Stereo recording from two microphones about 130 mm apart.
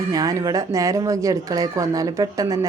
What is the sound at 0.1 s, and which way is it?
Speech, 25° right (ahead or behind).